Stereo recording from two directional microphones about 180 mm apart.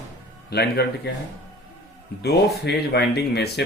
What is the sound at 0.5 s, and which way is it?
Speech, 65° left (ahead or behind).